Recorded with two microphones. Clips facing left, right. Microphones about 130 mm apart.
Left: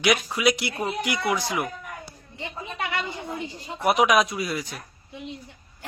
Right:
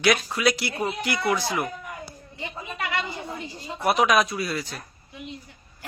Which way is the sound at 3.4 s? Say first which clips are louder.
Left 1 dB; 15° left (ahead or behind).